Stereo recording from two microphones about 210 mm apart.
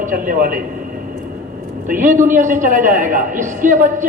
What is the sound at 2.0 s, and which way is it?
A woman's voice, 40° right (ahead or behind).